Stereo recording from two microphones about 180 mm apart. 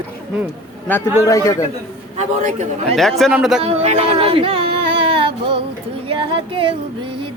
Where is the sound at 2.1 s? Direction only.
45° right (ahead or behind).